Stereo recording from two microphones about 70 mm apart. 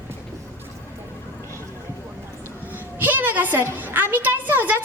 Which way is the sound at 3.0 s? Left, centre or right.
Right.